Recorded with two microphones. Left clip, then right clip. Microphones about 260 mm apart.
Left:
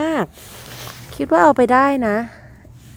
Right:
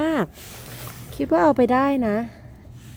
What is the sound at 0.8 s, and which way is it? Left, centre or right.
Speech, left.